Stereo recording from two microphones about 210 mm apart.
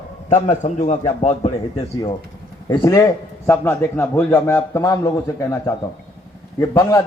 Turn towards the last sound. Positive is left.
turn(degrees=15)  # may be behind; listen again after turning